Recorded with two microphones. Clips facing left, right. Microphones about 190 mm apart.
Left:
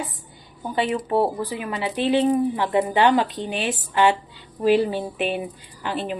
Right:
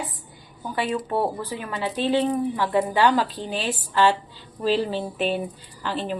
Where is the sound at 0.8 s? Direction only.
20° left (ahead or behind).